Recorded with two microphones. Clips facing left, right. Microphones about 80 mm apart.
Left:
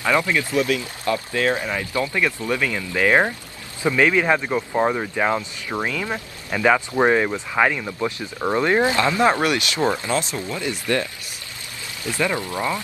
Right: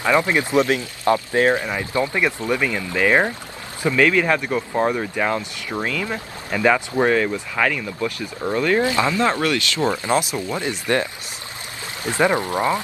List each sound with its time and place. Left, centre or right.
0.0 s speech: right
3.1 s speech: centre
10.0 s speech: right